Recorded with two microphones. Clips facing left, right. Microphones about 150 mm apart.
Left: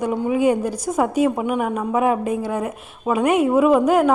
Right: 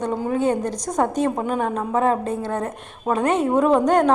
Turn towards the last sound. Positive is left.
turn(degrees=5)  # may be behind; listen again after turning